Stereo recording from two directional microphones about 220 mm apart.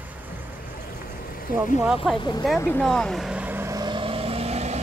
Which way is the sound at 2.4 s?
10° left (ahead or behind).